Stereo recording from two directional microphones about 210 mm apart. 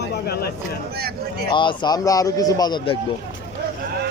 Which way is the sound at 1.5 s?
20° left (ahead or behind).